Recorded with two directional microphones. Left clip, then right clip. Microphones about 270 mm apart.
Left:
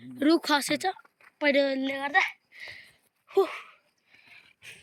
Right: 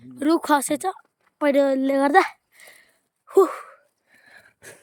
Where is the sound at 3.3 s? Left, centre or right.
Centre.